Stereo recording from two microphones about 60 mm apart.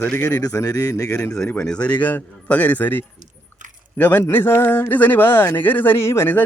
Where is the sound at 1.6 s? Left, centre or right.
Centre.